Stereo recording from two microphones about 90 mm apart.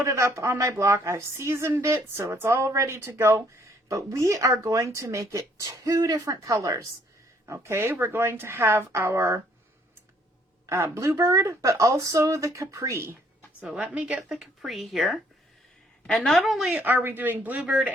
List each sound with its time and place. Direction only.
0.0 s a woman's voice: 35° right (ahead or behind)
3.8 s a woman's voice: 40° right (ahead or behind)
10.7 s a woman's voice: 30° right (ahead or behind)
13.6 s speech: 10° right (ahead or behind)
16.7 s speech: 20° right (ahead or behind)